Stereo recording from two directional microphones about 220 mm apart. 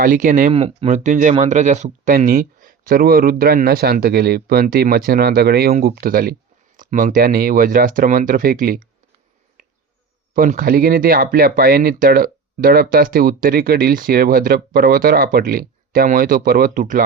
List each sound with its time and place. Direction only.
0.0 s speech: 35° right (ahead or behind)
10.3 s speech: 40° right (ahead or behind)